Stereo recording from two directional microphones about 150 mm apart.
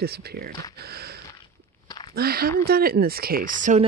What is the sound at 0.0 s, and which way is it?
Speech, 90° right.